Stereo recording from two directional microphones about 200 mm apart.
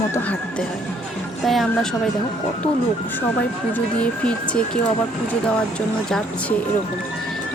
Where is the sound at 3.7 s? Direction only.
5° left (ahead or behind).